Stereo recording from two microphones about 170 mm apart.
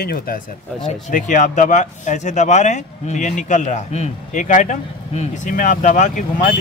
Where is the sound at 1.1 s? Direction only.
50° left (ahead or behind).